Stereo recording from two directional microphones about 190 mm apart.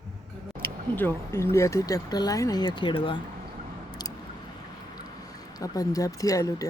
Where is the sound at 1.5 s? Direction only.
15° left (ahead or behind).